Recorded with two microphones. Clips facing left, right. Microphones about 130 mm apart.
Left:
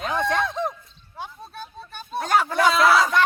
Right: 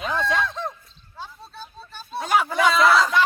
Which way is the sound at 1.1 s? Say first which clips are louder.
Left 3 dB; 15° left (ahead or behind).